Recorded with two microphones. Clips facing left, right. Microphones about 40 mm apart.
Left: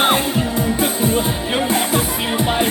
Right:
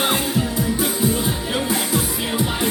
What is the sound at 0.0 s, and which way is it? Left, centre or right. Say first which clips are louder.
Music: left 4 dB; left.